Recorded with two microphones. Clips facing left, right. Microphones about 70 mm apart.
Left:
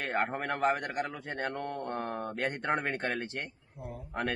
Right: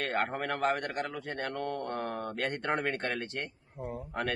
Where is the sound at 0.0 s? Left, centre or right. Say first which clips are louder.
Even; centre.